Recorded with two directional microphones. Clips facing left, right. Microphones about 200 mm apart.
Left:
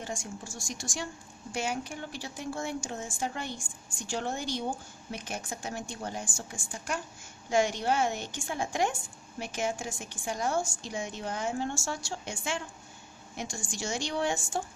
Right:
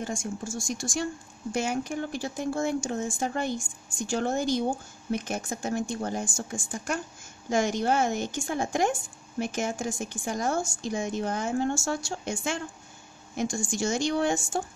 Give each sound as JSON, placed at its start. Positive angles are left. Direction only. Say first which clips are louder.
{"t": 0.0, "sound": "a woman's voice", "louder": "right 6 dB", "side_deg": -45}